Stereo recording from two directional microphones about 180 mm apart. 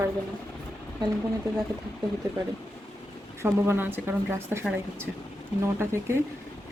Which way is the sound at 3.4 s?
10° right (ahead or behind).